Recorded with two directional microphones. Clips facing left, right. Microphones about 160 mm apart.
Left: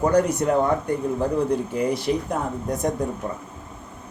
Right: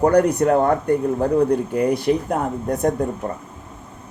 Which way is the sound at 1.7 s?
55° right (ahead or behind).